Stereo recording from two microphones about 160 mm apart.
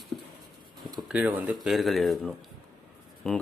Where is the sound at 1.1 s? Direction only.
10° right (ahead or behind).